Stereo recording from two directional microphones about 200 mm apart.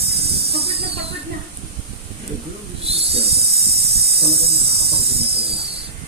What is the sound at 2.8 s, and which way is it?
Snake, 30° right (ahead or behind).